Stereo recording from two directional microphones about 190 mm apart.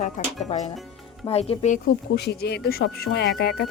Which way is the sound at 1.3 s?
35° left (ahead or behind).